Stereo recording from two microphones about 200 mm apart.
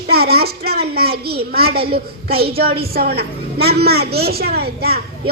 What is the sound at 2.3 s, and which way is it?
Speech, 30° right (ahead or behind).